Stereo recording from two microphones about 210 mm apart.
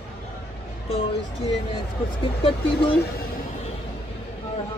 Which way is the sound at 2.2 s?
25° left (ahead or behind).